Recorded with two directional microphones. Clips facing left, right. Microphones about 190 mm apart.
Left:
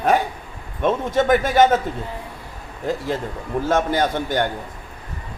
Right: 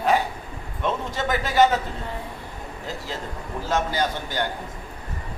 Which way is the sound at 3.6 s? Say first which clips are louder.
Left 4 dB; 50° left (ahead or behind).